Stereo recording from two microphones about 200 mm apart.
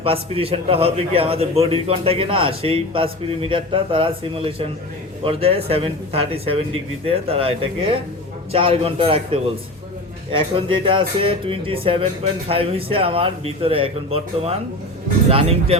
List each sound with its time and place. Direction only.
0.0 s a man's voice: 30° right (ahead or behind)